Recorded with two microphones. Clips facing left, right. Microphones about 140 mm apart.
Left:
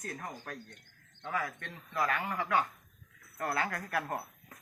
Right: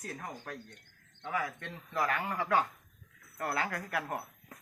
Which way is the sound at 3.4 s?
20° right (ahead or behind).